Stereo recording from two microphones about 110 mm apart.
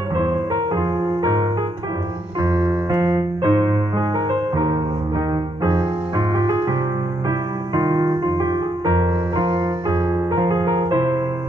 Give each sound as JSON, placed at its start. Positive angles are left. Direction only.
{"t": 0.1, "sound": "music", "side_deg": -40}
{"t": 2.4, "sound": "keyboard", "side_deg": -20}
{"t": 2.9, "sound": "keyboard", "side_deg": -35}
{"t": 4.3, "sound": "music", "side_deg": -40}